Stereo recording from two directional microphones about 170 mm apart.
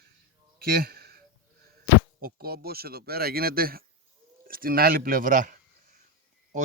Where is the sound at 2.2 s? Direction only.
65° right (ahead or behind).